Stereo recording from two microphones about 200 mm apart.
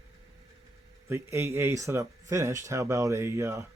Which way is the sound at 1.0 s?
15° right (ahead or behind).